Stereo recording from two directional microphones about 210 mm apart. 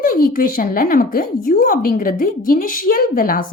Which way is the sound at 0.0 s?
45° left (ahead or behind).